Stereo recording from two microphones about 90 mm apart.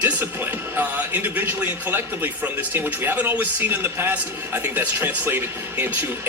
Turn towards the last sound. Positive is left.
turn(degrees=-20)  # may be behind; listen again after turning